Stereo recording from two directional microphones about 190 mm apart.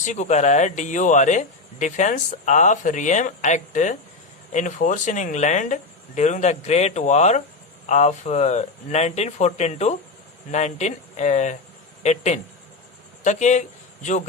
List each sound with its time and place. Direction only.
0.0 s speech: 40° left (ahead or behind)